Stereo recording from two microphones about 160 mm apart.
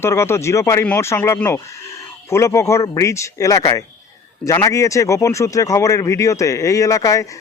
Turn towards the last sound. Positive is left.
turn(degrees=20)  # may be behind; listen again after turning